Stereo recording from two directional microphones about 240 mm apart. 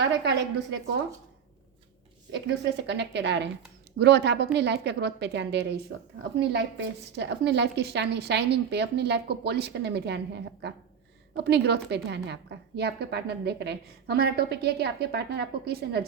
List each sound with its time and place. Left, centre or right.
0.0 s a woman's voice: right
2.3 s a woman's voice: right